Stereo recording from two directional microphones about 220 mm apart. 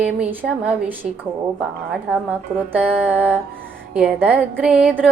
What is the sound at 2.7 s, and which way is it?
Female singing, 10° right (ahead or behind).